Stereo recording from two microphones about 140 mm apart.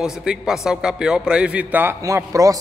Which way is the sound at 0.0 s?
5° right (ahead or behind).